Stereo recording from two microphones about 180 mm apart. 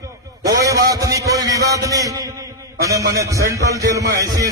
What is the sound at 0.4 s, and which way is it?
A man's voice, 20° right (ahead or behind).